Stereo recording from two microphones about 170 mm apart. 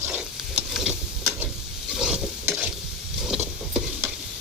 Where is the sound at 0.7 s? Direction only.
Centre (ahead or behind).